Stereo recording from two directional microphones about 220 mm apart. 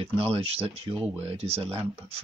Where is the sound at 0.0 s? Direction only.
25° right (ahead or behind).